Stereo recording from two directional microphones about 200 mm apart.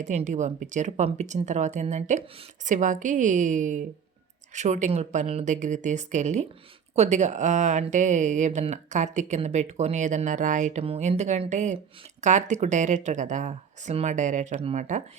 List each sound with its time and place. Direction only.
0.0 s speech: 35° right (ahead or behind)